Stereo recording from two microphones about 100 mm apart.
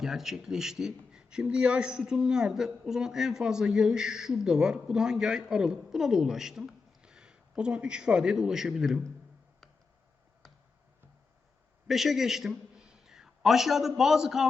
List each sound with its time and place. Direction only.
0.0 s speech: 5° right (ahead or behind)
11.9 s a man's voice: centre (ahead or behind)